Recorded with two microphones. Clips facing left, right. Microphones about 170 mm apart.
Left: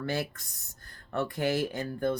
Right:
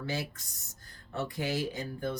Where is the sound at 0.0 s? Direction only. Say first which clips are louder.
Left 4 dB; 55° left (ahead or behind).